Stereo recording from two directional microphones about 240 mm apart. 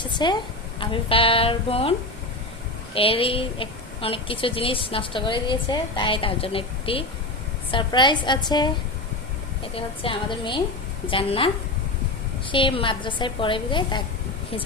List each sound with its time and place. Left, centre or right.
0.0 s a woman's voice: centre
9.7 s a woman's voice: left